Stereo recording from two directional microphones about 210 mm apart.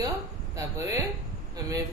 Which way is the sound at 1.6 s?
15° right (ahead or behind).